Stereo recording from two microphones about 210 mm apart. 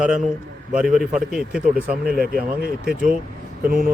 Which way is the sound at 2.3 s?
45° right (ahead or behind).